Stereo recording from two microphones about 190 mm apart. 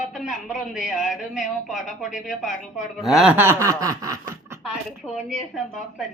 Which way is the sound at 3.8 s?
15° right (ahead or behind).